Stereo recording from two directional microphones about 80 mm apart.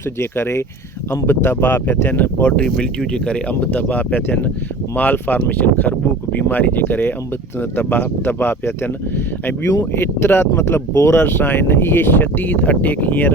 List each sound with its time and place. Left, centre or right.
0.2 s speech: left